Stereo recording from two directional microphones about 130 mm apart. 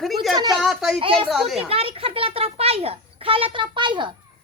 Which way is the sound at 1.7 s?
45° right (ahead or behind).